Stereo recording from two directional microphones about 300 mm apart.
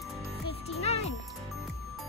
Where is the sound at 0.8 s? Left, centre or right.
Left.